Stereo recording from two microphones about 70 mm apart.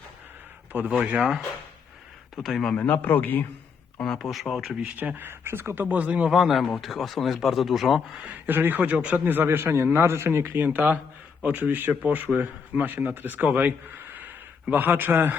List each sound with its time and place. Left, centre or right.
0.7 s a man's voice: right
1.2 s a man's voice: centre
2.7 s a man's voice: left
4.2 s a man's voice: centre
4.8 s a man's voice: right
6.3 s a man's voice: centre
8.4 s a man's voice: right